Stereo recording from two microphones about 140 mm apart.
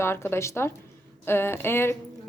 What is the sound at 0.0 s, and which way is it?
A woman's voice, 15° left (ahead or behind).